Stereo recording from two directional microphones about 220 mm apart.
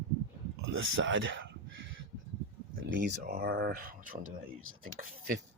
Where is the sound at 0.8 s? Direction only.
60° right (ahead or behind).